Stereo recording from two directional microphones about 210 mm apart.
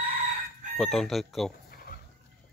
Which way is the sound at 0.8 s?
Centre (ahead or behind).